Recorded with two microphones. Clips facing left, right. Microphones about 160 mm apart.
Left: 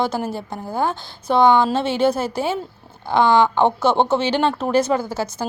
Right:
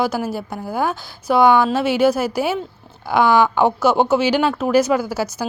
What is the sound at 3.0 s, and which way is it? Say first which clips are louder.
Speech: even; 20° left (ahead or behind).